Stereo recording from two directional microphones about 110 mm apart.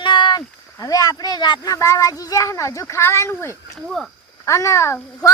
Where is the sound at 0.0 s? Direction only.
45° left (ahead or behind).